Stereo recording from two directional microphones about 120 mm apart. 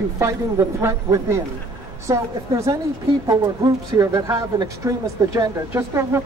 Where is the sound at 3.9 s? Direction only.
25° right (ahead or behind).